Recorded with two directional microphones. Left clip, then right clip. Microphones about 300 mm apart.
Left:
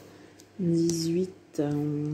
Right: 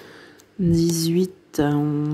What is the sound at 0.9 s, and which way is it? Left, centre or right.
Speech, right.